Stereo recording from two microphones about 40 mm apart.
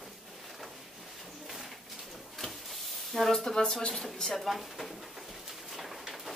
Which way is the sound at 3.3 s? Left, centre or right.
Centre.